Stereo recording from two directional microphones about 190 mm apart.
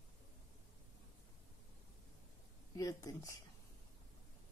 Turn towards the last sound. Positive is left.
turn(degrees=15)  # may be behind; listen again after turning